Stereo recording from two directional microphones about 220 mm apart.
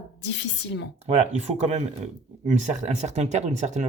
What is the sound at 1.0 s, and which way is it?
Speech, 30° right (ahead or behind).